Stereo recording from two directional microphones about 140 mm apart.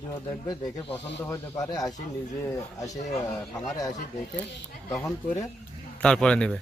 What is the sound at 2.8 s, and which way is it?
Speech, 55° left (ahead or behind).